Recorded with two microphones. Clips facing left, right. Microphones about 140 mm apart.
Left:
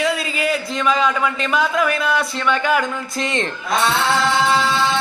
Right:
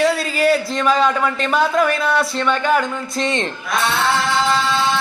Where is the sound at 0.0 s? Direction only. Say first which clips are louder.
Right 4 dB; 35° right (ahead or behind).